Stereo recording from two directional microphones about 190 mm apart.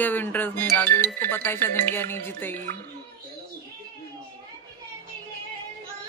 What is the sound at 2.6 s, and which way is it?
Speech, 50° right (ahead or behind).